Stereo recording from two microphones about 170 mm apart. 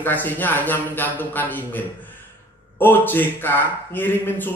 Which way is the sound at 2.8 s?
10° left (ahead or behind).